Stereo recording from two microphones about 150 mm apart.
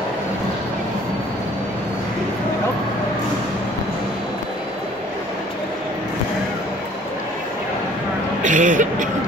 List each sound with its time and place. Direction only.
8.4 s speech: 55° right (ahead or behind)